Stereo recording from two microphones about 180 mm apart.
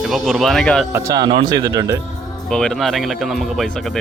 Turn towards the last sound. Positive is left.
turn(degrees=0)  # may be behind; listen again after turning